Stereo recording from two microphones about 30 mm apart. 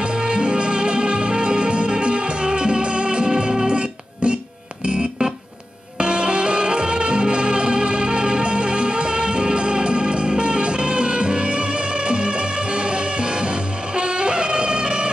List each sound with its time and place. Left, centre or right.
0.0 s music: right
3.6 s music: right
5.9 s music: right